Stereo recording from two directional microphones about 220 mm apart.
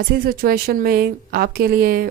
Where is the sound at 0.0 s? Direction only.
40° right (ahead or behind).